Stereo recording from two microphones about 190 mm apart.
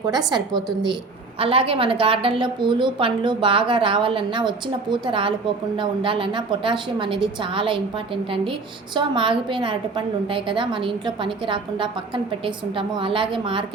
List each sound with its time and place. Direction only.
0.0 s a woman's voice: 20° right (ahead or behind)